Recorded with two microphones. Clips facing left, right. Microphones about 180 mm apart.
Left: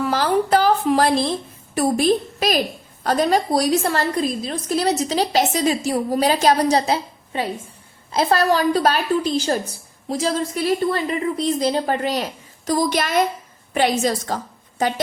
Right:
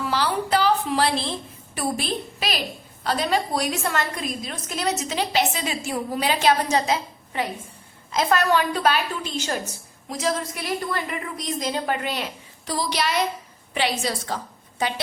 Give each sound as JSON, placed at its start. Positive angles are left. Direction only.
{"t": 0.1, "sound": "a woman's voice", "side_deg": 45}